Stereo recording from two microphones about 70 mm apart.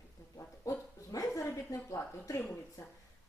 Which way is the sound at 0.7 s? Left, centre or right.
Left.